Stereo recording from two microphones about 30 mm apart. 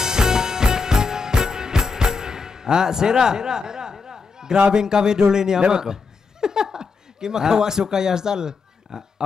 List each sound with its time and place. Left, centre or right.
0.0 s music: centre
4.0 s a sound: right
4.6 s speech: right